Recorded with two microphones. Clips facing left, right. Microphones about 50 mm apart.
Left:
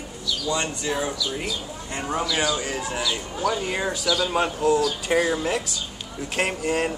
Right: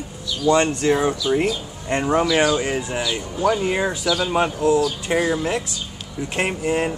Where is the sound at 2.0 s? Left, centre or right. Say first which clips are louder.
Right 7 dB; right.